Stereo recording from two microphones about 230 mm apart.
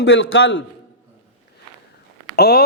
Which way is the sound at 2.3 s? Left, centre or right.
Left.